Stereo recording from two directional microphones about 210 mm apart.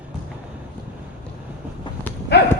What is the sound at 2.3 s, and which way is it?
Horse, 55° left (ahead or behind).